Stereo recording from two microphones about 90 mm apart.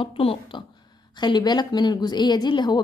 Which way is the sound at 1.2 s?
55° left (ahead or behind).